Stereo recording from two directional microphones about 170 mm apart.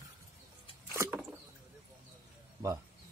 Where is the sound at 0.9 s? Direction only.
15° right (ahead or behind).